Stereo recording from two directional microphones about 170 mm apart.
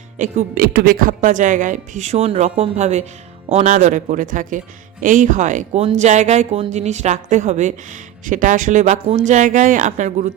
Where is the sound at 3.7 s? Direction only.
50° right (ahead or behind).